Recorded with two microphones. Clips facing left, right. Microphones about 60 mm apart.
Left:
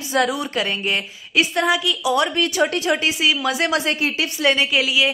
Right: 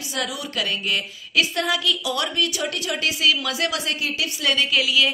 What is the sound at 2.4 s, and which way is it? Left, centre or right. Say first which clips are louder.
Speech: left 6 dB; left.